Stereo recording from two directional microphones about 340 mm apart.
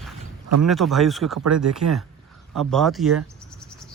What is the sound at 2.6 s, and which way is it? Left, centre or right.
Cricket, centre.